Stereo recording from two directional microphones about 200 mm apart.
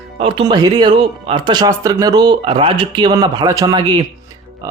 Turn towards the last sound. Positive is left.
turn(degrees=-20)  # may be behind; listen again after turning